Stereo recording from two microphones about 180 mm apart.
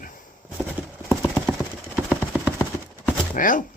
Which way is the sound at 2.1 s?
5° left (ahead or behind).